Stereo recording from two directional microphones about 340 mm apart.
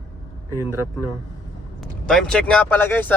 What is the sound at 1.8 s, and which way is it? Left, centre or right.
Speech, centre.